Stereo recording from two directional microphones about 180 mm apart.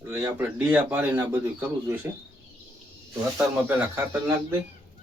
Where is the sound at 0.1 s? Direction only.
15° right (ahead or behind).